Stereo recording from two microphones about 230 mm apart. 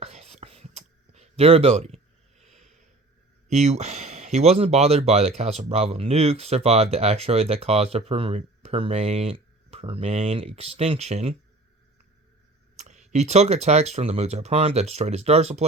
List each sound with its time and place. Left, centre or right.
0.0 s whispering: right
3.5 s speech: right
12.7 s speech: right